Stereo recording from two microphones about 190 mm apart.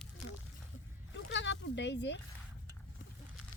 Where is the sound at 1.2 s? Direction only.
70° left (ahead or behind).